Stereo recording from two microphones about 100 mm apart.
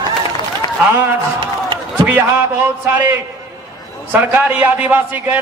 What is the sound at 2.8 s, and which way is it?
A man's voice, 20° right (ahead or behind).